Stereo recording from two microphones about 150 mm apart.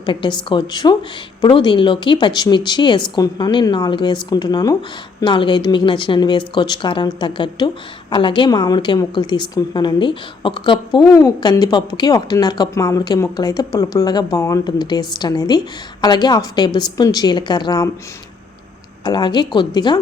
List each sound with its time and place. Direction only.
0.0 s a woman's voice: 30° left (ahead or behind)
19.0 s a woman's voice: 30° left (ahead or behind)